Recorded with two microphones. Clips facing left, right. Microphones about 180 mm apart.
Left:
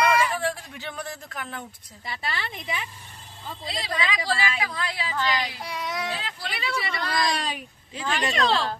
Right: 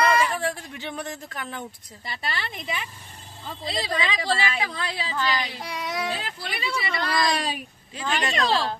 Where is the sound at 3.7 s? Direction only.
25° right (ahead or behind).